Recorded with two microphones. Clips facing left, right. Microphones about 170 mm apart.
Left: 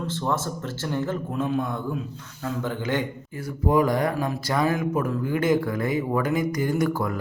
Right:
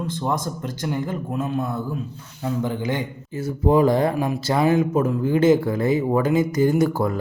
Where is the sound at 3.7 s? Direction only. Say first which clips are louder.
Right 4 dB; 25° right (ahead or behind).